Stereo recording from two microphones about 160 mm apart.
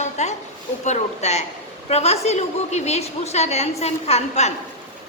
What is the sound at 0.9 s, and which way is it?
A woman's voice, 45° left (ahead or behind).